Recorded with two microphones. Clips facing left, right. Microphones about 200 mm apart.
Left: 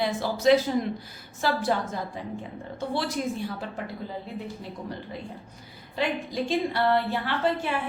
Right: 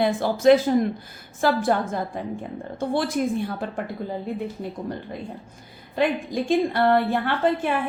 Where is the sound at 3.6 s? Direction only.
50° right (ahead or behind).